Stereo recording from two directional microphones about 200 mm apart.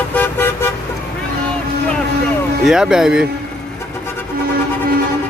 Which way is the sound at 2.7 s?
5° right (ahead or behind).